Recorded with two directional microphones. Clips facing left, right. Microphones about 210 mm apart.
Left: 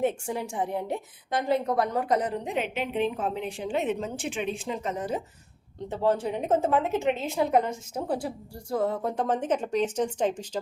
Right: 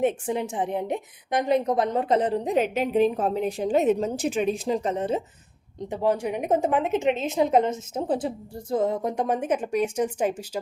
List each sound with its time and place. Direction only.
0.0 s a woman's voice: 20° right (ahead or behind)
5.9 s a woman's voice: 15° right (ahead or behind)